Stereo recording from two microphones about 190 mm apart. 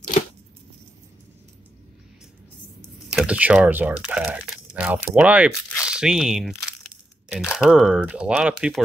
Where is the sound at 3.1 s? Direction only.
5° right (ahead or behind).